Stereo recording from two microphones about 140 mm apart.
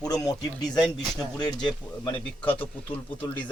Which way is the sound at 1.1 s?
30° left (ahead or behind).